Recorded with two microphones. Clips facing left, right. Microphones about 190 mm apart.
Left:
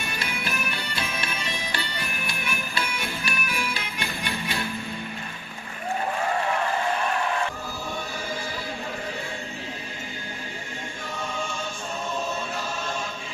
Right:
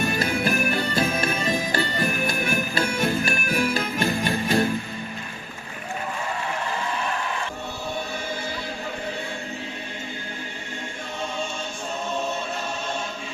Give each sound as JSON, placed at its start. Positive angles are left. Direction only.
{"t": 0.0, "sound": "music", "side_deg": -45}